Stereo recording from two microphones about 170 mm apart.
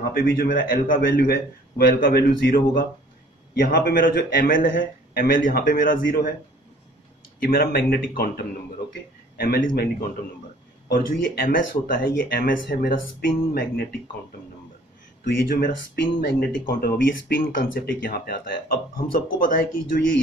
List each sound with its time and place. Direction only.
0.1 s speech: 60° left (ahead or behind)
7.3 s speech: 60° left (ahead or behind)
9.4 s speech: 65° left (ahead or behind)
11.1 s speech: 60° left (ahead or behind)
15.2 s speech: 60° left (ahead or behind)